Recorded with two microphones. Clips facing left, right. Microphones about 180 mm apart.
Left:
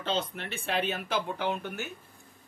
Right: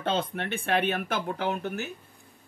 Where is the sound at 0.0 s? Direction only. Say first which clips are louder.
Right 3 dB; 55° right (ahead or behind).